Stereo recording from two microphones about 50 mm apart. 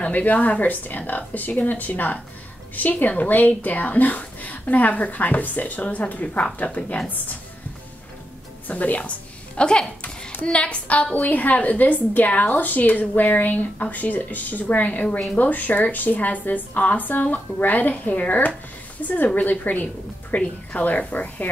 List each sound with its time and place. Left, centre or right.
0.0 s a woman's voice: left
8.6 s a woman's voice: left
9.6 s a woman's voice: centre; by 21.5 s left